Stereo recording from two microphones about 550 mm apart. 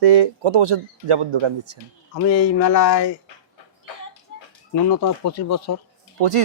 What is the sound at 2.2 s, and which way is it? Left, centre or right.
Speech, left.